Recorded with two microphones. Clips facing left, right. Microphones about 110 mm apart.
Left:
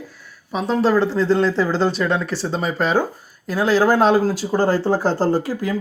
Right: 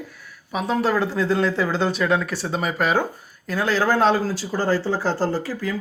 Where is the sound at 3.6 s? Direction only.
10° left (ahead or behind).